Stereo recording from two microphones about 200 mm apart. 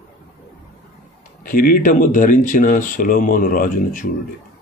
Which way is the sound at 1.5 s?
45° left (ahead or behind).